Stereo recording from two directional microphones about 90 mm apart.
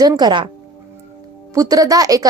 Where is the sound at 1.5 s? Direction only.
40° right (ahead or behind).